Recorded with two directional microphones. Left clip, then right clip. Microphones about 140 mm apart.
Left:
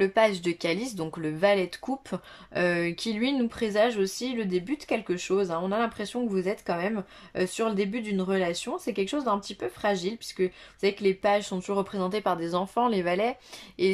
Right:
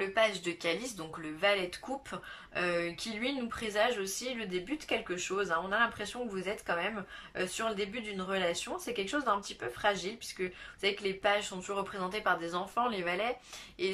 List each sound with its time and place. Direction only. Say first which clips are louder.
0.0 s speech: left 7 dB; 35° left (ahead or behind)